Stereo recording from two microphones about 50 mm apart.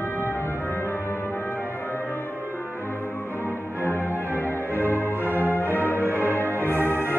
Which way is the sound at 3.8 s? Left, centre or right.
Left.